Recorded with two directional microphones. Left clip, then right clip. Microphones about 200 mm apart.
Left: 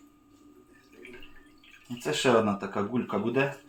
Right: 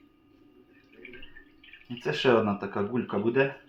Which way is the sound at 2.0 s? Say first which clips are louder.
Even; 5° right (ahead or behind).